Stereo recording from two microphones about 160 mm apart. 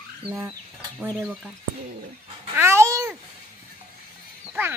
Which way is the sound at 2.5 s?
15° right (ahead or behind).